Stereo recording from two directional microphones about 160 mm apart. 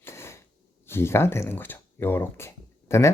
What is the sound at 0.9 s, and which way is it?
Speech, 15° left (ahead or behind).